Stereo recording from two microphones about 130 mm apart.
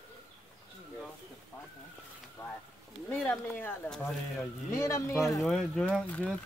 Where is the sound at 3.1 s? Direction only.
15° left (ahead or behind).